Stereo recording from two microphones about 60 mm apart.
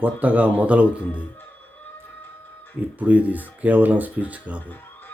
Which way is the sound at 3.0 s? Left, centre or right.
Right.